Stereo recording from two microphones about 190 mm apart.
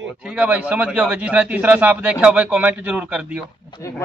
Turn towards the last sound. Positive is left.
turn(degrees=25)  # may be behind; listen again after turning